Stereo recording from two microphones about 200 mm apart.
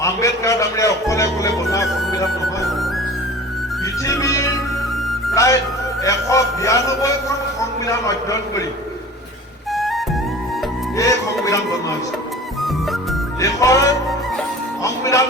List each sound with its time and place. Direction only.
0.0 s speech: 15° left (ahead or behind)
4.0 s speech: 15° left (ahead or behind)
9.7 s music: centre (ahead or behind)
10.9 s speech: 15° left (ahead or behind)
13.4 s speech: 15° left (ahead or behind)